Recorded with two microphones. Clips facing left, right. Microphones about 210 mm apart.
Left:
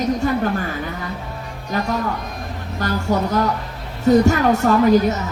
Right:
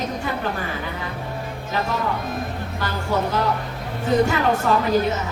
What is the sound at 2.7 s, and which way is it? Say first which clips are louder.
Speech: left 6 dB; 45° left (ahead or behind).